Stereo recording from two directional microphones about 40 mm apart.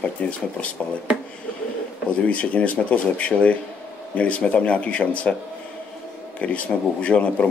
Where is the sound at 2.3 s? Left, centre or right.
Left.